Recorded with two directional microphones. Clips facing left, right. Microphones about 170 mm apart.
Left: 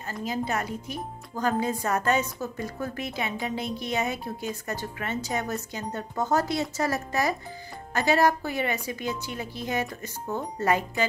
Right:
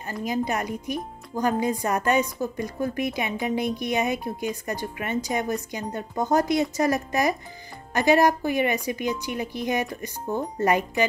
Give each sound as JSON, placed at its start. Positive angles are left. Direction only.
{"t": 0.0, "sound": "speech", "side_deg": -15}